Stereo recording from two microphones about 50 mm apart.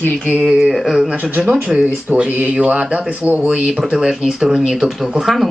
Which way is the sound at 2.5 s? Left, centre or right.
Right.